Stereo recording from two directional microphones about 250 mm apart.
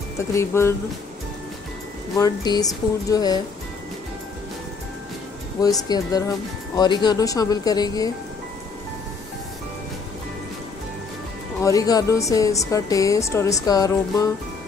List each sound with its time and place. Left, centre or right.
0.3 s a woman's voice: centre
2.1 s a woman's voice: centre
5.6 s a woman's voice: centre
11.6 s a woman's voice: centre